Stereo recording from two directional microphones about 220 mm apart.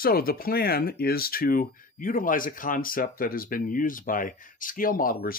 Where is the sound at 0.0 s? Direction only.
40° left (ahead or behind).